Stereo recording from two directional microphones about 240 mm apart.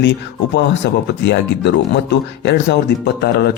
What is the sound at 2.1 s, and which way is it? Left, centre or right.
Speech, left.